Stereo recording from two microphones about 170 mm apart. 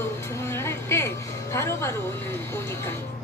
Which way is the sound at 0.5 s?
15° left (ahead or behind).